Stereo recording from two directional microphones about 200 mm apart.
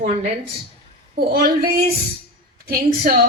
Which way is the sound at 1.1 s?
50° right (ahead or behind).